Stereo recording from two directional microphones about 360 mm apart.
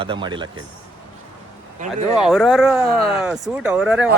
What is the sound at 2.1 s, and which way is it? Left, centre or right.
Speech, centre.